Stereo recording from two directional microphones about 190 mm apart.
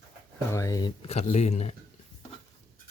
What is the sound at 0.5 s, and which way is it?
Speech, 20° left (ahead or behind).